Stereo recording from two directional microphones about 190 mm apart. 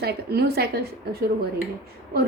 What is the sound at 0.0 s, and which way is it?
A woman's voice, 55° right (ahead or behind).